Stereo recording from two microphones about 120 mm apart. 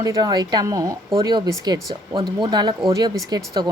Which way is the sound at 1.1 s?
40° right (ahead or behind).